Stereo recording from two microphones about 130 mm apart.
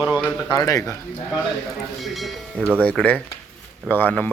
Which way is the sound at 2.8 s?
10° left (ahead or behind).